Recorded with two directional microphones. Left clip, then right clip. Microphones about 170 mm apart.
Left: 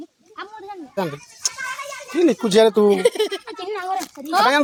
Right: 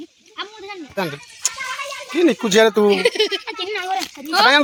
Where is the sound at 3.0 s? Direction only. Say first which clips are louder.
Right 1 dB; 40° left (ahead or behind).